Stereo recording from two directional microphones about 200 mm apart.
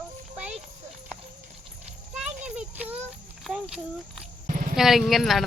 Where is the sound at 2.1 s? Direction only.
5° right (ahead or behind).